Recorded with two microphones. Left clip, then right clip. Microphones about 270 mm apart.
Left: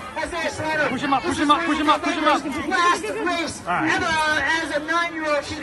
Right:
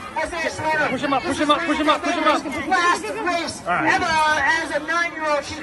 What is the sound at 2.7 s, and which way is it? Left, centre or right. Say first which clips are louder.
Speech: right 1 dB; right.